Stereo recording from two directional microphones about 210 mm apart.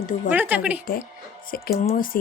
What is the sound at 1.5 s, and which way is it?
Speech, 35° left (ahead or behind).